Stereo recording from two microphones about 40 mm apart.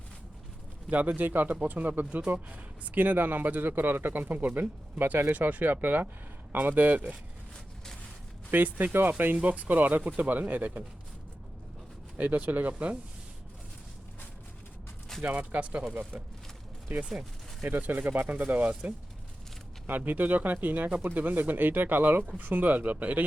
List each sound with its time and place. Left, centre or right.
0.9 s a man's voice: right
1.3 s a man's voice: right
4.2 s a man's voice: right
8.4 s speech: right
9.3 s a man's voice: right
12.1 s a man's voice: right
15.2 s speech: right
16.9 s a man's voice: right
20.1 s a man's voice: right